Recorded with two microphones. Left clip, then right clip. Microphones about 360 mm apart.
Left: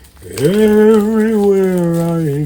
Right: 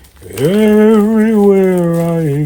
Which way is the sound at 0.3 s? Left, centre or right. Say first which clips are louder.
Right 1 dB; centre.